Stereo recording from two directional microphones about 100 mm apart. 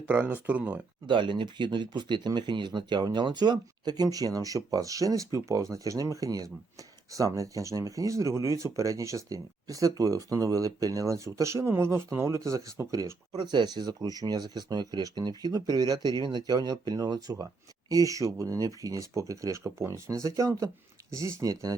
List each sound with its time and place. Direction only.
0.1 s speech: 20° right (ahead or behind)
1.0 s speech: 55° right (ahead or behind); by 21.8 s 35° right (ahead or behind)